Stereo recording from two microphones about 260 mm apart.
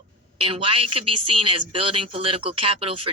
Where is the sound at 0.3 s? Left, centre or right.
Right.